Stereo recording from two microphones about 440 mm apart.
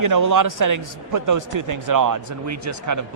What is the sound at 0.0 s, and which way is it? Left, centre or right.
Speech, right.